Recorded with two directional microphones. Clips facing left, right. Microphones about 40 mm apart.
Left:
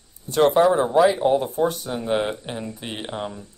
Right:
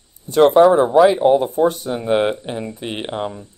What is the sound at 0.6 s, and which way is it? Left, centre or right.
Speech, right.